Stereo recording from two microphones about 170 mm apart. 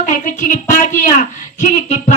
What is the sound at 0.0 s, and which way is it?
A woman's voice, 50° left (ahead or behind).